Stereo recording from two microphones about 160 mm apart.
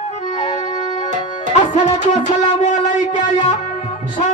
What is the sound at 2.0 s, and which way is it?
Music, 45° left (ahead or behind).